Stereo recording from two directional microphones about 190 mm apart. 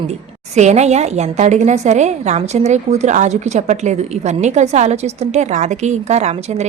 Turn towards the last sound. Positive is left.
turn(degrees=-35)  # may be behind; listen again after turning